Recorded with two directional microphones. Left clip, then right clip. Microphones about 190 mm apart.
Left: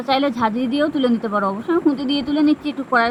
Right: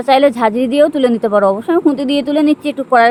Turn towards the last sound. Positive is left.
turn(degrees=-50)  # may be behind; listen again after turning